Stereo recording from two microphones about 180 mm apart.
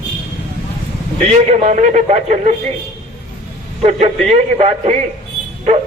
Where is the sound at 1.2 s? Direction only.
40° right (ahead or behind).